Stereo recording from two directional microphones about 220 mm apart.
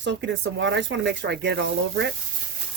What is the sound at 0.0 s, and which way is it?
Speech, 55° right (ahead or behind).